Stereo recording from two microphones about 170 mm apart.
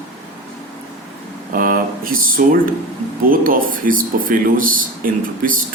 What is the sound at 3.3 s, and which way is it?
Speech, 55° right (ahead or behind).